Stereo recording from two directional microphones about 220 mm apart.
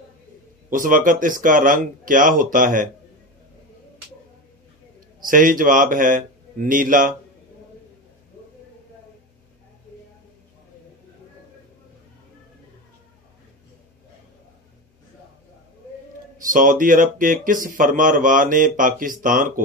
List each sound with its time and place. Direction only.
0.7 s speech: 40° right (ahead or behind)
5.2 s speech: 40° right (ahead or behind)
16.3 s speech: 40° right (ahead or behind)